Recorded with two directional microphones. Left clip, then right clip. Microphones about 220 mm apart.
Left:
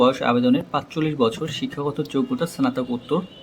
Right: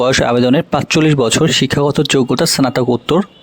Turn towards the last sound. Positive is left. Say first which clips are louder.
# right 11 dB
turn(degrees=-50)  # may be behind; listen again after turning